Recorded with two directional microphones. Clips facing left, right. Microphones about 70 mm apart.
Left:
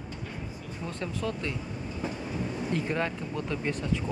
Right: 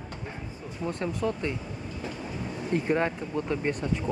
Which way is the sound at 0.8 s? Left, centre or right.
Right.